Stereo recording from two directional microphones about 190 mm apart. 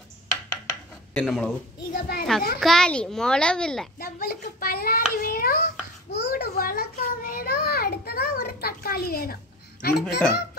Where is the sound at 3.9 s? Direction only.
50° left (ahead or behind).